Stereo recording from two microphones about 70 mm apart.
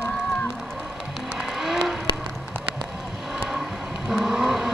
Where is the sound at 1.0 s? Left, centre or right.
Centre.